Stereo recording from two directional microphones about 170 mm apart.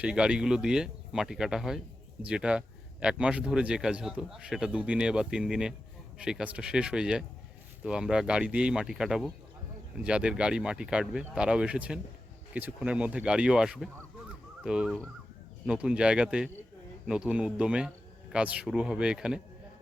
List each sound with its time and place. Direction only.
0.0 s speech: 5° right (ahead or behind)